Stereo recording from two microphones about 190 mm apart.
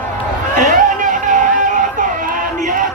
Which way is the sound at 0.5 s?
40° right (ahead or behind).